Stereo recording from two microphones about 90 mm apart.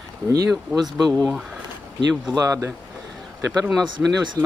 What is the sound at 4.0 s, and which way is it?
Speech, 20° right (ahead or behind).